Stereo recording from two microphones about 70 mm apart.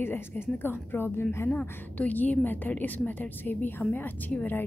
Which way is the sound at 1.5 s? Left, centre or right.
Centre.